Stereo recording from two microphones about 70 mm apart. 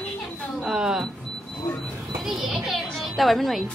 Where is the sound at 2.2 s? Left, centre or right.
Centre.